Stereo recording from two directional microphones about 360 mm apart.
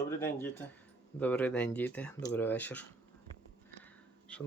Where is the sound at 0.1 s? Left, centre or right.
Centre.